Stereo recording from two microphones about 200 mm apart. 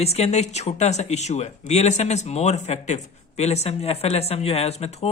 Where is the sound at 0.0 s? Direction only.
30° left (ahead or behind).